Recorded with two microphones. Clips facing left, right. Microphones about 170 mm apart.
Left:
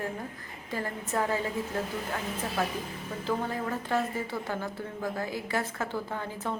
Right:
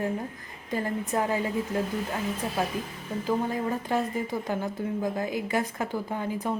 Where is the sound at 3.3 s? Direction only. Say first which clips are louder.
Right 3 dB; 15° right (ahead or behind).